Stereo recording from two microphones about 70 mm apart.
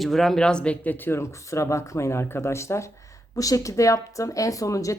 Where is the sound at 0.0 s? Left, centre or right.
Centre.